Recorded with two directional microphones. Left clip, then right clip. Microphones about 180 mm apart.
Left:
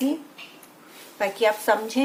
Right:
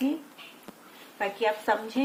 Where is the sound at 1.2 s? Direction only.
20° left (ahead or behind).